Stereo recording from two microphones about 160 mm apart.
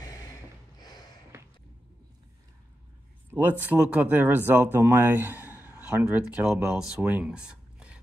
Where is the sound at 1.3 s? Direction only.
15° right (ahead or behind).